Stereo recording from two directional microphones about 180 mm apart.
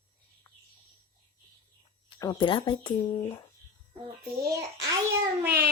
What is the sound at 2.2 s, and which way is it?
Speech, 25° left (ahead or behind).